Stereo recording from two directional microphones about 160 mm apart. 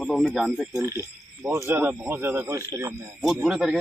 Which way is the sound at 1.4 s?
15° right (ahead or behind).